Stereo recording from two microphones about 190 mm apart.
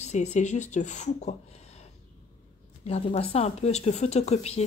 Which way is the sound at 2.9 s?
30° left (ahead or behind).